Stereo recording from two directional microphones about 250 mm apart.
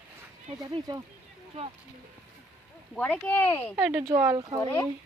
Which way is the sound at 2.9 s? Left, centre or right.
Centre.